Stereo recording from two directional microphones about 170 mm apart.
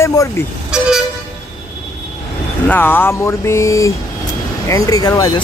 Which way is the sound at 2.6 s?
10° left (ahead or behind).